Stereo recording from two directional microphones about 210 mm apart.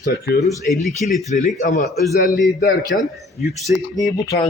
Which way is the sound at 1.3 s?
40° left (ahead or behind).